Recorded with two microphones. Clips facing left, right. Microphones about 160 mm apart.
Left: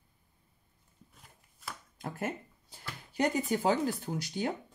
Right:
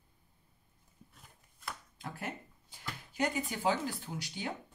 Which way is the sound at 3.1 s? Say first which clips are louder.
Left 5 dB; 40° left (ahead or behind).